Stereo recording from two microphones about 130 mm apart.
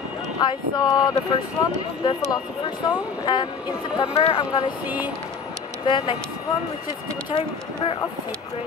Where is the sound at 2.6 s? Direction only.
35° left (ahead or behind).